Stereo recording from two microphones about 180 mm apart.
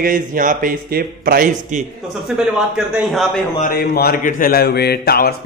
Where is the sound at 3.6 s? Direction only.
60° left (ahead or behind).